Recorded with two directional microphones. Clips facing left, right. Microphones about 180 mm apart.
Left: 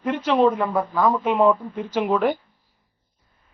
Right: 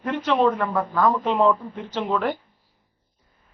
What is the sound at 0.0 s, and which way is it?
A man's voice, 10° left (ahead or behind).